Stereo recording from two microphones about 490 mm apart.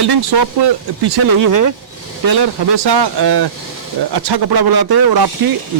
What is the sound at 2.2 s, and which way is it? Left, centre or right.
Speech, right.